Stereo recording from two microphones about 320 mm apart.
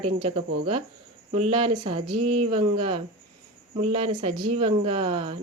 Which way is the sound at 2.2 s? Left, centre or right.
Centre.